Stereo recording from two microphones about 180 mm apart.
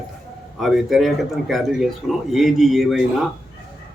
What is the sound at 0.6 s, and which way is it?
A man's voice, centre (ahead or behind).